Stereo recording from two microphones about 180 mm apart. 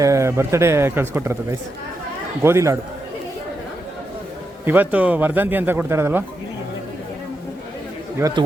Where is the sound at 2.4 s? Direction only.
15° right (ahead or behind).